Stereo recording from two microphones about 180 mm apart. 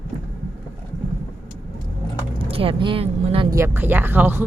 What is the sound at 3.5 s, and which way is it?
Speech, 15° right (ahead or behind).